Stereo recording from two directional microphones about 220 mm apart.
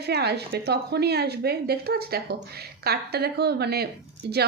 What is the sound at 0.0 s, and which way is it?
Speech, 50° right (ahead or behind).